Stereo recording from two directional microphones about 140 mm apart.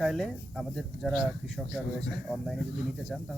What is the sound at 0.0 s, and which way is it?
Speech, centre (ahead or behind).